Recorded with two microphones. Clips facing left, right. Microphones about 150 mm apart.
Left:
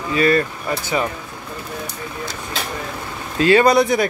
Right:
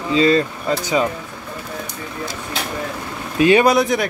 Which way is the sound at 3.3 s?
15° right (ahead or behind).